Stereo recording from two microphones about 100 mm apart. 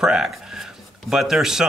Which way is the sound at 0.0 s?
5° right (ahead or behind).